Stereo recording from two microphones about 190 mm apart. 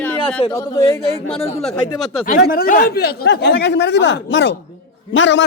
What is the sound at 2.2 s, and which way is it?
Speech, 45° left (ahead or behind).